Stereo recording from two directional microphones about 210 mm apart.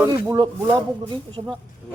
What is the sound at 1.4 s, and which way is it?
Speech, 25° right (ahead or behind).